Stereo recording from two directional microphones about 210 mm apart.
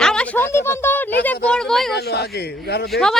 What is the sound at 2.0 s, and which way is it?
Speech, 50° left (ahead or behind).